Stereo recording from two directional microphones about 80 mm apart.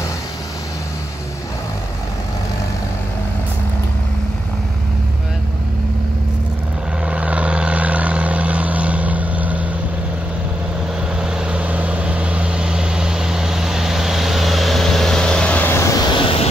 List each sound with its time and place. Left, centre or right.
7.1 s vehicle: centre
11.1 s vehicle: centre
15.7 s vehicle: left
16.0 s vehicle: left